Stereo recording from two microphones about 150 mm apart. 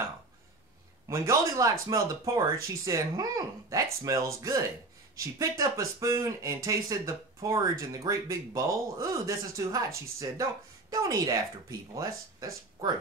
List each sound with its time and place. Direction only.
1.0 s speech: 20° right (ahead or behind)